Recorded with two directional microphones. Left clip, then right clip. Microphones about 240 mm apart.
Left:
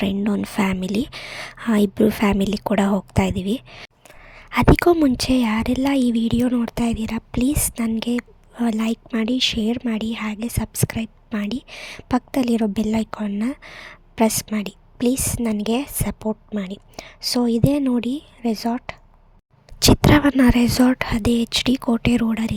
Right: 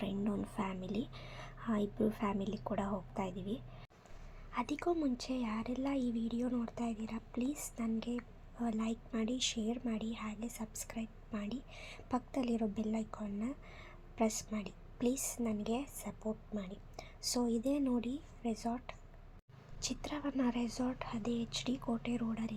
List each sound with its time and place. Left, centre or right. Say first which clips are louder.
0.0 s a woman's voice: left 16 dB; left